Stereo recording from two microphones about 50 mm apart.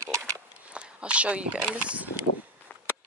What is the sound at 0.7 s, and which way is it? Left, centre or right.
Speech, right.